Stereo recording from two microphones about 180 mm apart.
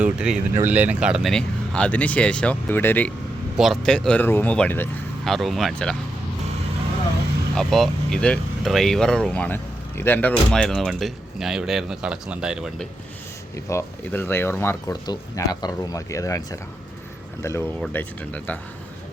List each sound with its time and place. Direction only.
0.0 s speech: 5° right (ahead or behind)
7.5 s speech: centre (ahead or behind)
13.7 s speech: 15° left (ahead or behind)